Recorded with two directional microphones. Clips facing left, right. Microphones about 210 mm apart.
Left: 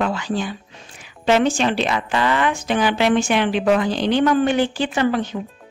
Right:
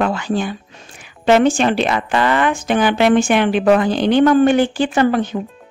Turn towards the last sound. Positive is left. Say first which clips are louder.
# right 4 dB
turn(degrees=-50)  # may be behind; listen again after turning